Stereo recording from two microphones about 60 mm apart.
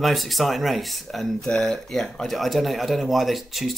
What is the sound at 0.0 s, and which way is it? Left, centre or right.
Speech, centre.